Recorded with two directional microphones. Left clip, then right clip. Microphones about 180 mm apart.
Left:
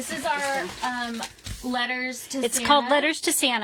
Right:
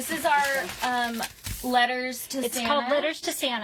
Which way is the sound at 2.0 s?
45° right (ahead or behind).